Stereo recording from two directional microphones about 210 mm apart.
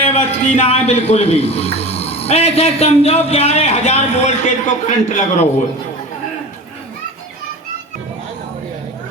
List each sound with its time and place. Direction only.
0.1 s a man's voice: 30° left (ahead or behind)